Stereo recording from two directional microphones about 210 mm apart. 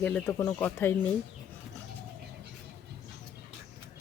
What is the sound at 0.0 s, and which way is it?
Speech, 10° left (ahead or behind).